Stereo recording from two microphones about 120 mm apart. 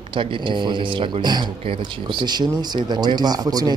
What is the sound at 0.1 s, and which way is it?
Speech, 45° right (ahead or behind).